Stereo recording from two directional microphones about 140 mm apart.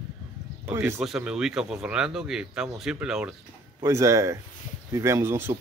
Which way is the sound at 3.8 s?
20° right (ahead or behind).